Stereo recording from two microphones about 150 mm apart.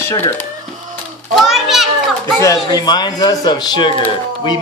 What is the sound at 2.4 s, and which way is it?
Speech, 25° left (ahead or behind).